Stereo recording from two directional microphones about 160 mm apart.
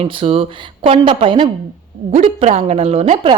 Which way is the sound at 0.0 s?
35° right (ahead or behind).